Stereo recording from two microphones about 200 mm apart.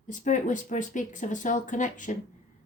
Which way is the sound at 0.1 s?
40° left (ahead or behind).